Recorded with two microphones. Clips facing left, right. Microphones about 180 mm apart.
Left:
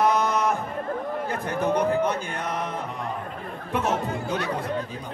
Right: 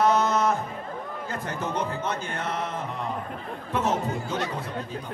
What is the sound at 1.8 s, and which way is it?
Speech, 15° left (ahead or behind).